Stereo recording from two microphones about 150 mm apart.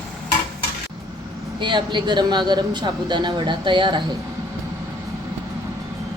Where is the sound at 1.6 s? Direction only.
30° right (ahead or behind).